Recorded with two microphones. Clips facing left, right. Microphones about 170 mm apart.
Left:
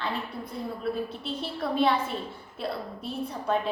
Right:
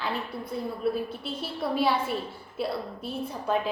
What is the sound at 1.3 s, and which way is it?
Speech, 5° right (ahead or behind).